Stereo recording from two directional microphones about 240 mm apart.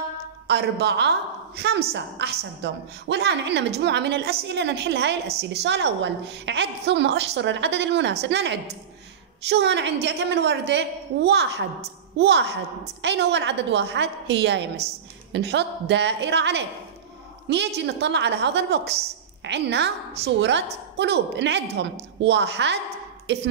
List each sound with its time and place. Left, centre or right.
0.5 s a woman's voice: right